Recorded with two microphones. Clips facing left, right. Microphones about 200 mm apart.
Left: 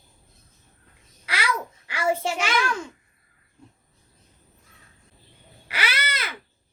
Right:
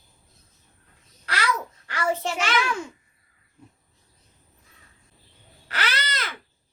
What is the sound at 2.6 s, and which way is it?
Speech, 5° right (ahead or behind).